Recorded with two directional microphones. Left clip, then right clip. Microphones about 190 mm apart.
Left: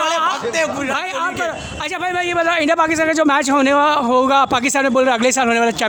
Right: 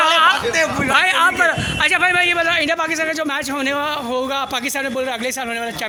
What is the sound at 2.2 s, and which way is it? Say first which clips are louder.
A man's voice: right 1 dB; 40° left (ahead or behind).